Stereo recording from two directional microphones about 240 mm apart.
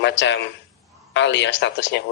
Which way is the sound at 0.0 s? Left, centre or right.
Left.